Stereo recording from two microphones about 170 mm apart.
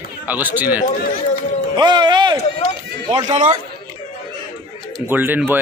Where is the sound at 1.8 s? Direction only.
25° right (ahead or behind).